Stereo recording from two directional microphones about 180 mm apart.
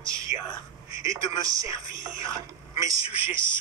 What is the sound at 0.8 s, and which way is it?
Speech, 20° right (ahead or behind).